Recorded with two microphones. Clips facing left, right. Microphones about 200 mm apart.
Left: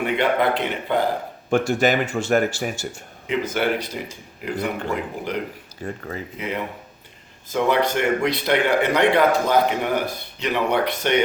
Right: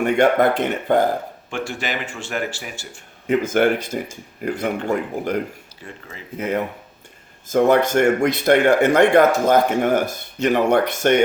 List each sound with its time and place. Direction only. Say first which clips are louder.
0.0 s speech: right 4 dB; 45° right (ahead or behind)
1.5 s speech: left 9 dB; 45° left (ahead or behind)
3.2 s speech: right 5 dB; 50° right (ahead or behind)
5.8 s speech: left 9 dB; 45° left (ahead or behind)
6.3 s speech: right 8 dB; 45° right (ahead or behind)